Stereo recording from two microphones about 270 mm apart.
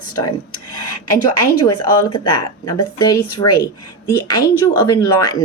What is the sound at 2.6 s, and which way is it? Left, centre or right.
Speech, centre.